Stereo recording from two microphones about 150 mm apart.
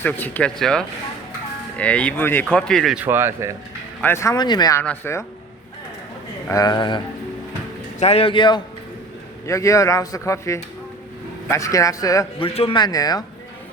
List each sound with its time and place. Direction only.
0.0 s speech: 10° left (ahead or behind)
3.0 s speech: 15° right (ahead or behind)
4.0 s speech: 20° left (ahead or behind)
4.8 s speech: 15° left (ahead or behind)
6.5 s speech: 25° left (ahead or behind)
7.9 s speech: 45° left (ahead or behind)
9.5 s speech: 20° left (ahead or behind)
12.4 s speech: 40° left (ahead or behind)